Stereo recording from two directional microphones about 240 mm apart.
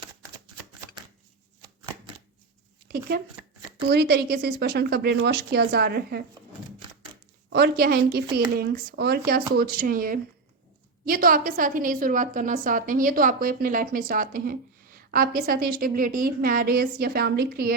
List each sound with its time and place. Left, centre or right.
3.9 s a woman's voice: right
7.5 s a woman's voice: right